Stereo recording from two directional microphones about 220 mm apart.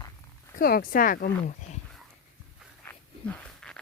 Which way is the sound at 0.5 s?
40° left (ahead or behind).